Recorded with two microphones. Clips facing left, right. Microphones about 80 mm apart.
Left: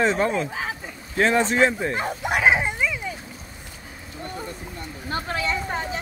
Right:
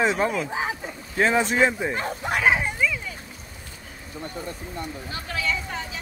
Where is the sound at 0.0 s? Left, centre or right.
Centre.